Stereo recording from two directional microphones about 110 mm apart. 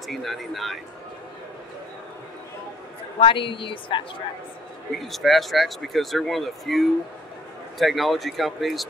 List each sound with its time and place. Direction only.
0.0 s speech: centre (ahead or behind)
3.2 s a woman's voice: 55° left (ahead or behind)
4.9 s speech: centre (ahead or behind)